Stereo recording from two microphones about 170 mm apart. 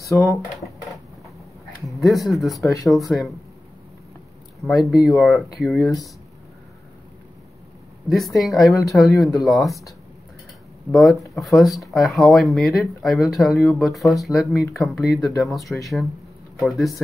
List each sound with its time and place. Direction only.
0.0 s speech: 20° left (ahead or behind)
1.9 s speech: centre (ahead or behind)
4.6 s speech: centre (ahead or behind)
8.1 s speech: centre (ahead or behind)
10.9 s speech: centre (ahead or behind)